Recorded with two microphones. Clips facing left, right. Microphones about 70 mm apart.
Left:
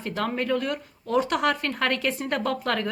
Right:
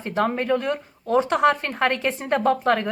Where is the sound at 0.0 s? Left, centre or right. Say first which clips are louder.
Right 4 dB; right.